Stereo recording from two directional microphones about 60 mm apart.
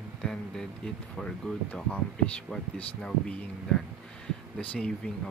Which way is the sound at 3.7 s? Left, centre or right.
Centre.